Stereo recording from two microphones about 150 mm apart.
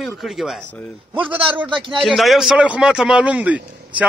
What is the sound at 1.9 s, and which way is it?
Speech, centre (ahead or behind).